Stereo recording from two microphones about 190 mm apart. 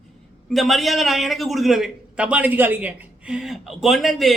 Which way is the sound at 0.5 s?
Centre (ahead or behind).